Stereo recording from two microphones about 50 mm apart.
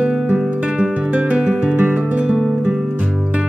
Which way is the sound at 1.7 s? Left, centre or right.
Right.